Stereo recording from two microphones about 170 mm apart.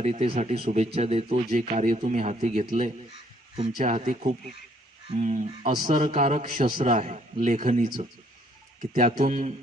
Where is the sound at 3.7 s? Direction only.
45° right (ahead or behind).